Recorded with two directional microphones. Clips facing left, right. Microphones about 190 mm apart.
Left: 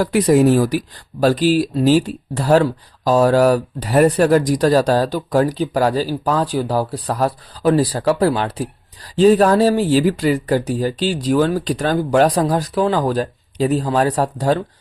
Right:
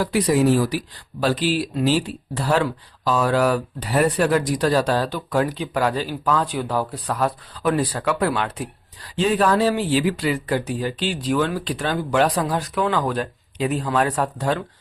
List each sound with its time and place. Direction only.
0.0 s speech: 50° left (ahead or behind)